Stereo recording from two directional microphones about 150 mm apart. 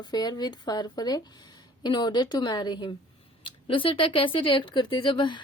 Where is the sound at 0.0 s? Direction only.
30° left (ahead or behind).